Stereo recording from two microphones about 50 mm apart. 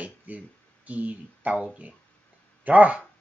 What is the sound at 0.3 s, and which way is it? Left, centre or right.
Speech, right.